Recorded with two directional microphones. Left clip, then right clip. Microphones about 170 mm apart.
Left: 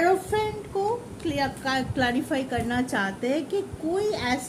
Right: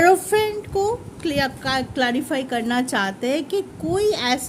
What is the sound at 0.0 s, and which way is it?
A woman's voice, 75° right (ahead or behind).